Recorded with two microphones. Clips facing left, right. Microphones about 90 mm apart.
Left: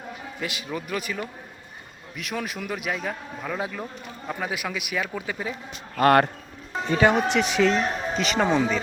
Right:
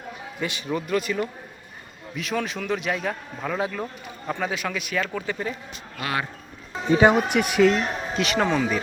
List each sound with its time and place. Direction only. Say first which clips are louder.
0.3 s a man's voice: right 4 dB; centre (ahead or behind)
6.0 s speech: left 11 dB; 55° left (ahead or behind)
6.9 s a man's voice: right 2 dB; 15° right (ahead or behind)